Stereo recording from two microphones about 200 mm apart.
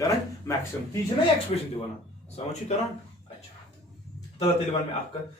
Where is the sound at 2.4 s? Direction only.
35° left (ahead or behind).